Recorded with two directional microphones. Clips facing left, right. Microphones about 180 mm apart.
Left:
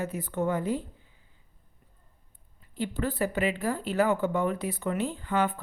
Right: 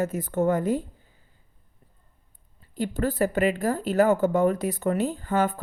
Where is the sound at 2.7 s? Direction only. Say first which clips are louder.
Right 4 dB; 45° right (ahead or behind).